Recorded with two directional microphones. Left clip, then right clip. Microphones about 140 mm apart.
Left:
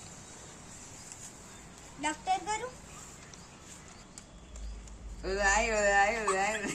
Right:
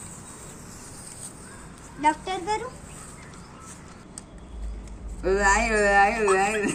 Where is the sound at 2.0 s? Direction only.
30° left (ahead or behind).